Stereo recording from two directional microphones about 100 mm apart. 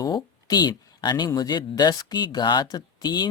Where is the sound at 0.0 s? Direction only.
40° left (ahead or behind).